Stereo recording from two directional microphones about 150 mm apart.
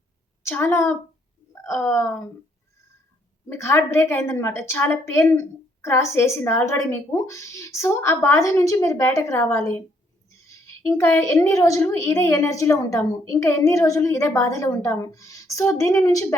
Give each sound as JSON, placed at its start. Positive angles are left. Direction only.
{"t": 0.4, "sound": "speech", "side_deg": 15}
{"t": 3.5, "sound": "a woman's voice", "side_deg": 15}